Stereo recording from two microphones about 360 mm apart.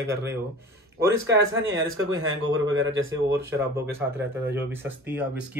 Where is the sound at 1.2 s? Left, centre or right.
Right.